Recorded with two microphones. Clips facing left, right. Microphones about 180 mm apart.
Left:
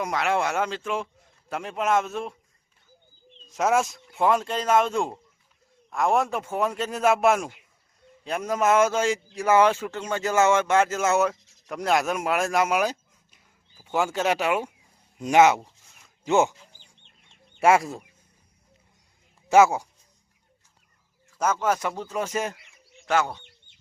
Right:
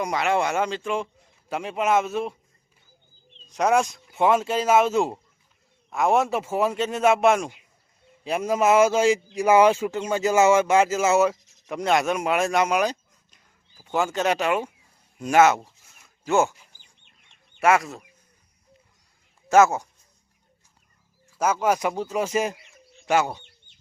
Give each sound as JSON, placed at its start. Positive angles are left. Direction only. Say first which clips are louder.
{"t": 0.0, "sound": "a man's voice", "louder": "right 2 dB", "side_deg": 0}
{"t": 3.5, "sound": "a man's voice", "louder": "right 2 dB", "side_deg": 0}
{"t": 15.6, "sound": "a sound", "louder": "even", "side_deg": -5}
{"t": 16.2, "sound": "speech", "louder": "even", "side_deg": 20}
{"t": 17.6, "sound": "speech", "louder": "left 1 dB", "side_deg": 30}
{"t": 19.5, "sound": "speech", "louder": "even", "side_deg": 10}
{"t": 21.3, "sound": "speech", "louder": "right 2 dB", "side_deg": -10}